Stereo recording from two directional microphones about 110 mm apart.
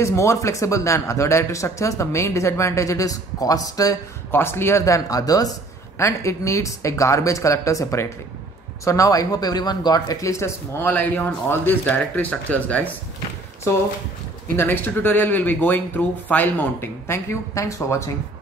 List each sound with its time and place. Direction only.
0.0 s speech: 25° left (ahead or behind)
4.3 s speech: 20° left (ahead or behind)
10.8 s speech: 15° left (ahead or behind)